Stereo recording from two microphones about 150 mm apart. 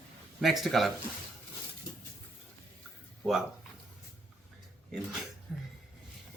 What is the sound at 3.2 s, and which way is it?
Speech, centre (ahead or behind).